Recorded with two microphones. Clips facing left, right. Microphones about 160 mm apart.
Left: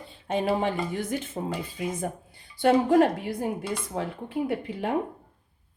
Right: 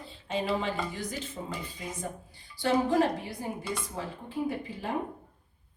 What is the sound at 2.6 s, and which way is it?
Speech, 55° left (ahead or behind).